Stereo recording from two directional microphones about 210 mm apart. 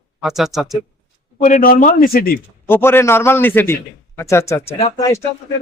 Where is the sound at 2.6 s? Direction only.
10° left (ahead or behind).